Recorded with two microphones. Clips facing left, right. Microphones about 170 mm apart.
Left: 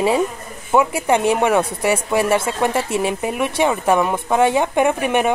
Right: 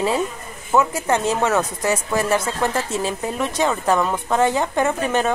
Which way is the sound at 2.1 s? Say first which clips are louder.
Left 3 dB; 25° left (ahead or behind).